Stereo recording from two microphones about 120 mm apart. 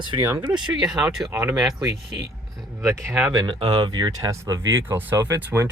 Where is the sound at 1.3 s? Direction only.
20° right (ahead or behind).